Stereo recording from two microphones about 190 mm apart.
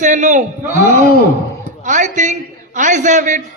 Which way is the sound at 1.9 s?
40° right (ahead or behind).